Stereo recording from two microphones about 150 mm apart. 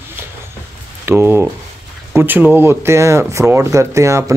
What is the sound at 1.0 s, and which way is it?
Speech, 15° right (ahead or behind).